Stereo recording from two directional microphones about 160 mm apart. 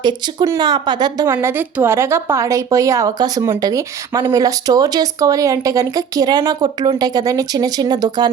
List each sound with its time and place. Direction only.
0.0 s speech: 25° right (ahead or behind)
1.3 s a woman's voice: 15° right (ahead or behind)